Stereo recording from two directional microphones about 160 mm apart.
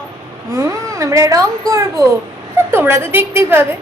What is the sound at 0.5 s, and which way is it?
A child's voice, 20° right (ahead or behind).